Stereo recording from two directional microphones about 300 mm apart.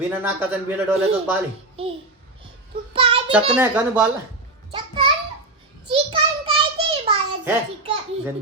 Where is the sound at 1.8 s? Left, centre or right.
Centre.